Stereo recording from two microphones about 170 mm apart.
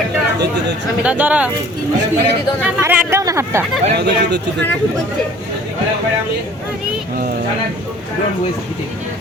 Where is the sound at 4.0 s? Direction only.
90° right.